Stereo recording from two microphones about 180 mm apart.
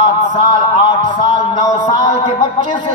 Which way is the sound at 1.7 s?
40° left (ahead or behind).